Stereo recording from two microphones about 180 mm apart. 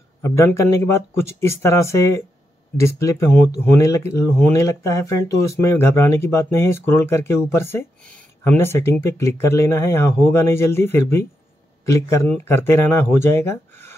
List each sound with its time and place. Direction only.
0.2 s speech: 15° left (ahead or behind)